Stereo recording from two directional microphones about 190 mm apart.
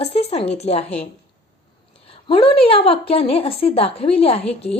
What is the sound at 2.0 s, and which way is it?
A woman's voice, 30° left (ahead or behind).